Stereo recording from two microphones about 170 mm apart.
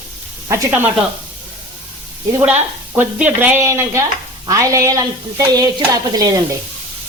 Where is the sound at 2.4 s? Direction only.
10° right (ahead or behind).